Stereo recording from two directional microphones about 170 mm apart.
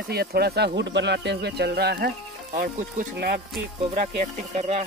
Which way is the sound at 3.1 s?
65° right (ahead or behind).